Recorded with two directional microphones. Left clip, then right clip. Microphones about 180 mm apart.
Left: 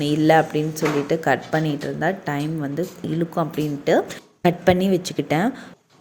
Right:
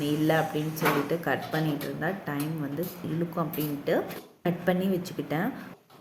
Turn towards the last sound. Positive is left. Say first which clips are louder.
# left 9 dB
turn(degrees=45)  # may be behind; listen again after turning